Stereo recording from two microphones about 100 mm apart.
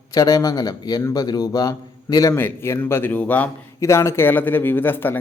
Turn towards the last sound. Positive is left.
turn(degrees=20)  # may be behind; listen again after turning